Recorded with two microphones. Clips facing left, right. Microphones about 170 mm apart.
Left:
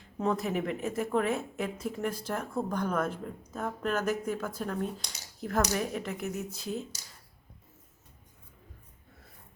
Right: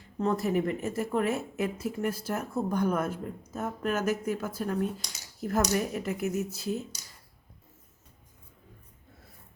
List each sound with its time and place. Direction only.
0.2 s speech: centre (ahead or behind)